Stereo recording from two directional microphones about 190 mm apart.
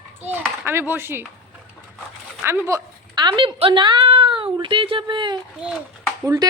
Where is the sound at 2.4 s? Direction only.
15° right (ahead or behind).